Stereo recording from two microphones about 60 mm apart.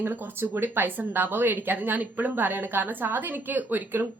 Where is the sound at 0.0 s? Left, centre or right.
Right.